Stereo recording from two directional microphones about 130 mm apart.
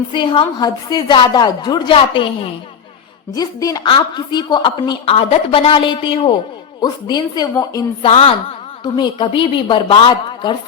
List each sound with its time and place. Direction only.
0.1 s a woman's voice: 40° left (ahead or behind)
2.0 s a woman's voice: 45° left (ahead or behind)
3.3 s a woman's voice: 30° left (ahead or behind)
6.8 s a woman's voice: 30° left (ahead or behind)
8.0 s a woman's voice: 50° left (ahead or behind)
8.8 s a woman's voice: 35° left (ahead or behind)